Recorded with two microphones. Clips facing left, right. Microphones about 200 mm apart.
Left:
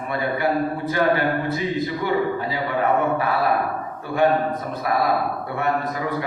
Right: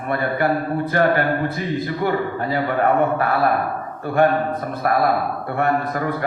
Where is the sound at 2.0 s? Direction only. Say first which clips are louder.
Even; 55° right (ahead or behind).